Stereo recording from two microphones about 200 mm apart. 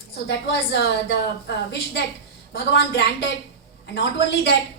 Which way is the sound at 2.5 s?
60° left (ahead or behind).